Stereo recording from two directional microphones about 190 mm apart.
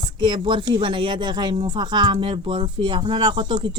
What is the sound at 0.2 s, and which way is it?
Speech, 25° right (ahead or behind).